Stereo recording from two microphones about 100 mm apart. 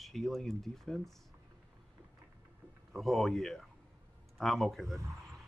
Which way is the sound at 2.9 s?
Centre (ahead or behind).